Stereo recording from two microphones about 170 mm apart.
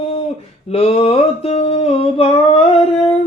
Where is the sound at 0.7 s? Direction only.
35° left (ahead or behind).